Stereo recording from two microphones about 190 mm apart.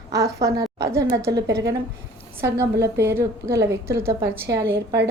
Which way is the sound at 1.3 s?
60° right (ahead or behind).